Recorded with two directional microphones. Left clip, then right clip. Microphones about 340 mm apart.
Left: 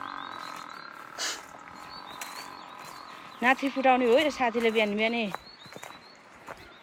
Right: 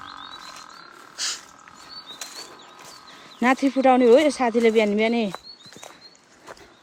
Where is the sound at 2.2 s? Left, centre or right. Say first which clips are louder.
Right 1 dB; centre.